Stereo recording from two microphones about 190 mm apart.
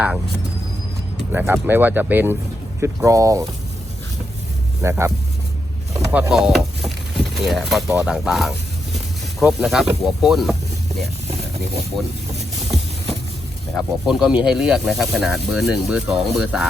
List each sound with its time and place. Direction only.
1.3 s speech: 10° right (ahead or behind)
4.8 s speech: 15° right (ahead or behind)
5.9 s vehicle: 10° right (ahead or behind)
7.3 s speech: centre (ahead or behind)
7.9 s speech: 10° right (ahead or behind)
8.1 s speech: centre (ahead or behind)
13.7 s speech: centre (ahead or behind)